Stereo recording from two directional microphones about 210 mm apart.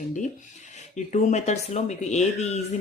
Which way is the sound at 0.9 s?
35° left (ahead or behind).